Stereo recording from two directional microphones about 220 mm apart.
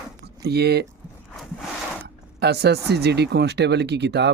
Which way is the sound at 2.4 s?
50° right (ahead or behind).